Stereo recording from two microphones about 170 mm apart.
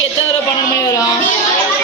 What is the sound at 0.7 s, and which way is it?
Speech, 20° left (ahead or behind).